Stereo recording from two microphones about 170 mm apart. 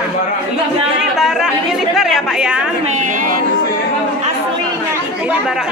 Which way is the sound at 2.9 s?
50° right (ahead or behind).